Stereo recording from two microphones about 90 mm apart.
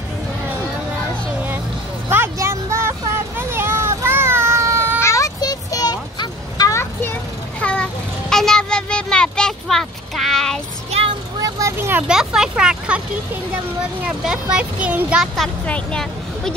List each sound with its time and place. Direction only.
2.0 s a sound: 25° right (ahead or behind)
5.0 s children playing: 40° left (ahead or behind)
6.7 s vehicle: 25° left (ahead or behind)
7.6 s children playing: 10° left (ahead or behind)
11.4 s vehicle: 30° right (ahead or behind)
12.1 s speech: 5° right (ahead or behind)
14.0 s speech: 10° right (ahead or behind)
15.6 s speech: 10° left (ahead or behind)